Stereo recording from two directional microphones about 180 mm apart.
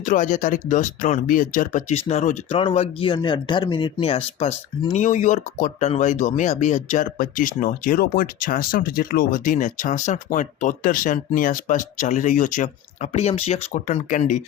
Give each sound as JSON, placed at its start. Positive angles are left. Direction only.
{"t": 0.0, "sound": "speech", "side_deg": 45}